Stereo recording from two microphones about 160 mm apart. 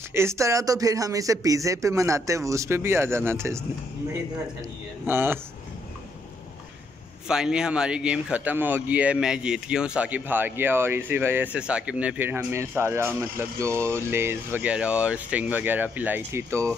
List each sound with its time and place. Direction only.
0.1 s speech: 15° right (ahead or behind)
5.0 s speech: 15° right (ahead or behind)
7.2 s speech: 5° right (ahead or behind)